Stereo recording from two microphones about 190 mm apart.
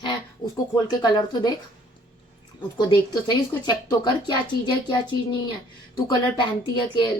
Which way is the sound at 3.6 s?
20° left (ahead or behind).